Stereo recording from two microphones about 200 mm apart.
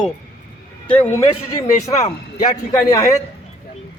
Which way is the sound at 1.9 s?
15° left (ahead or behind).